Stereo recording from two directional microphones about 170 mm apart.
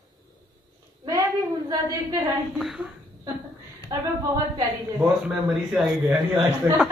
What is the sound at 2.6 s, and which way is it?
Speech, centre (ahead or behind).